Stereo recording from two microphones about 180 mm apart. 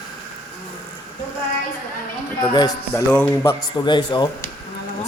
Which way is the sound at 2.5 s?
20° left (ahead or behind).